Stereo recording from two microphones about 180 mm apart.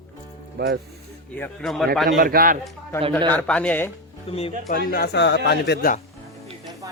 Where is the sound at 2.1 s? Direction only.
55° right (ahead or behind).